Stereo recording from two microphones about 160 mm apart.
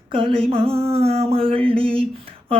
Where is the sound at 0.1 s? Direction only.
35° right (ahead or behind).